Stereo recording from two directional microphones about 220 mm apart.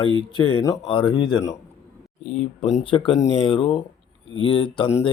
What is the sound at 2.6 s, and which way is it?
Speech, centre (ahead or behind).